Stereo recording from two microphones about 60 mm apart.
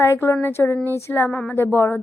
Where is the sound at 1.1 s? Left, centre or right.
Left.